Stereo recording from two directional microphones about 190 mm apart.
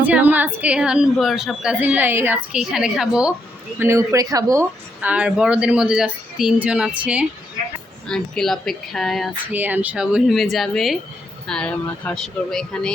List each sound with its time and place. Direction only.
0.0 s a woman's voice: 10° right (ahead or behind)
3.8 s speech: 15° right (ahead or behind)
4.9 s a woman's voice: 5° right (ahead or behind)